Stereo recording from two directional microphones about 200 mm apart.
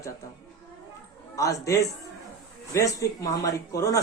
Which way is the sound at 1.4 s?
15° left (ahead or behind).